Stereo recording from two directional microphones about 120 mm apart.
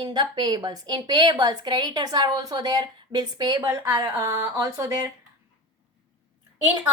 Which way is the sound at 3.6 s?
25° right (ahead or behind).